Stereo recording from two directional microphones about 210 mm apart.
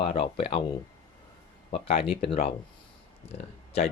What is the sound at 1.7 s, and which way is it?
Speech, 25° left (ahead or behind).